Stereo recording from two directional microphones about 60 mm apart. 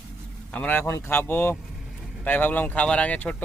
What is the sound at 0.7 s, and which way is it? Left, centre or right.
Speech, left.